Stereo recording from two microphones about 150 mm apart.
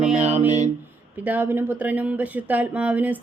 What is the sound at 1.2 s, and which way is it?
Speech, 10° right (ahead or behind).